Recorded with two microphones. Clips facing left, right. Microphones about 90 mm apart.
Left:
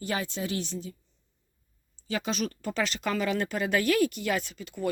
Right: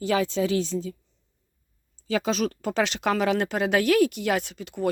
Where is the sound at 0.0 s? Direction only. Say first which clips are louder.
Right 8 dB; 90° right.